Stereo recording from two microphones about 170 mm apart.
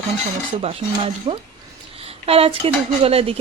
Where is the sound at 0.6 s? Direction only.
35° right (ahead or behind).